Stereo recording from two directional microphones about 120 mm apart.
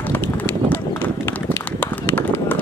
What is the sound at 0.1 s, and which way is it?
Run, 15° left (ahead or behind).